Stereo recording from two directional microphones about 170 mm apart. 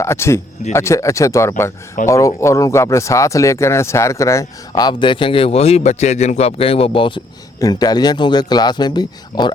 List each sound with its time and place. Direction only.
0.0 s speech: 15° left (ahead or behind)